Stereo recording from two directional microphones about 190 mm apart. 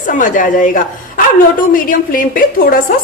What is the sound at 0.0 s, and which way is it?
A woman's voice, 45° left (ahead or behind).